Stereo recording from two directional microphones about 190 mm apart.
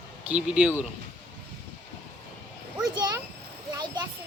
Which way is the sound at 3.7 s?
25° right (ahead or behind).